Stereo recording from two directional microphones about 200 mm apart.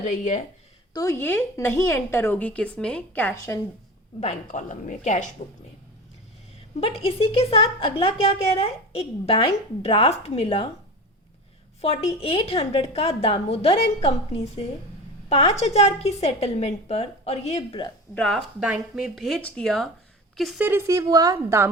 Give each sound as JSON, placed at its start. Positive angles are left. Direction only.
{"t": 0.0, "sound": "a woman's voice", "side_deg": 40}
{"t": 0.9, "sound": "speech", "side_deg": 15}
{"t": 4.2, "sound": "a woman's voice", "side_deg": 35}
{"t": 6.7, "sound": "a woman's voice", "side_deg": 30}
{"t": 11.8, "sound": "a woman's voice", "side_deg": 30}
{"t": 18.1, "sound": "a woman's voice", "side_deg": 5}